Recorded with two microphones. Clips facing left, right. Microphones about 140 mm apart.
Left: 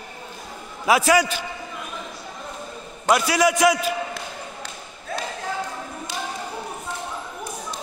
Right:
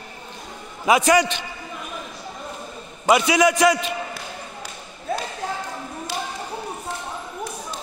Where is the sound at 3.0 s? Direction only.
Centre (ahead or behind).